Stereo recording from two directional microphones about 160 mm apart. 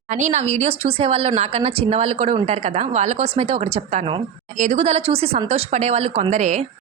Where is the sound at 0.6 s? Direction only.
40° right (ahead or behind).